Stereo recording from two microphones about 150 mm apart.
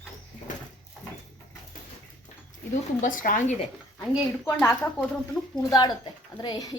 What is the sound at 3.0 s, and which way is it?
Speech, 60° left (ahead or behind).